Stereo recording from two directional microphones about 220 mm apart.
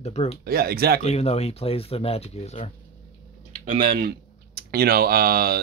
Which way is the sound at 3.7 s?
40° right (ahead or behind).